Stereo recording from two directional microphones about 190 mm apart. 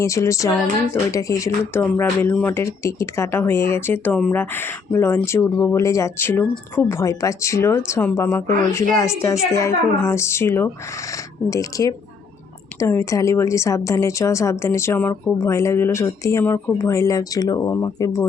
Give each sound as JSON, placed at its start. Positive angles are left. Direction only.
{"t": 0.0, "sound": "speech", "side_deg": 15}